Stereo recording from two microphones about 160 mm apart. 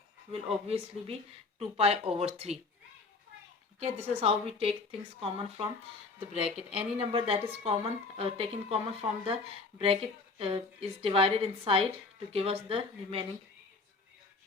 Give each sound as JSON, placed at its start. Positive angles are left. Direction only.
{"t": 0.3, "sound": "speech", "side_deg": -40}
{"t": 3.8, "sound": "speech", "side_deg": -40}
{"t": 6.4, "sound": "speech", "side_deg": -5}
{"t": 7.0, "sound": "speech", "side_deg": -35}